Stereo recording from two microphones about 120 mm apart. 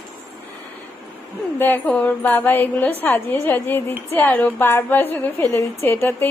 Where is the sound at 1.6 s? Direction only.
15° left (ahead or behind).